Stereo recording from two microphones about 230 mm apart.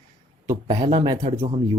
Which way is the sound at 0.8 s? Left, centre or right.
Centre.